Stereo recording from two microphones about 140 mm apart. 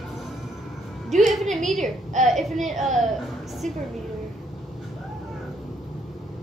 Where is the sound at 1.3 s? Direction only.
Centre (ahead or behind).